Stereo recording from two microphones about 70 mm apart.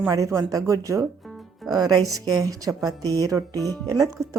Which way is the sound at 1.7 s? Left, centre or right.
Right.